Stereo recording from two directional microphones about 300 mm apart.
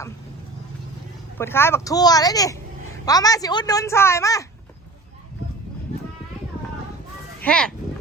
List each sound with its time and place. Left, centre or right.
1.4 s a woman's voice: centre
7.4 s speech: centre